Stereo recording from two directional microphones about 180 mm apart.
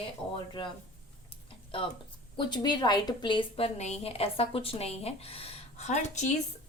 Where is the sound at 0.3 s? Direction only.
25° left (ahead or behind).